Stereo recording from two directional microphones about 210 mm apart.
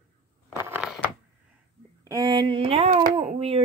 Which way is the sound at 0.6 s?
5° right (ahead or behind).